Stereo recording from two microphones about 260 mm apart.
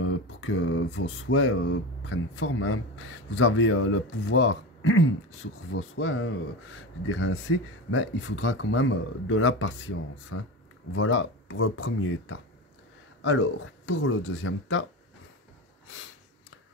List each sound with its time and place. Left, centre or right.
0.0 s speech: left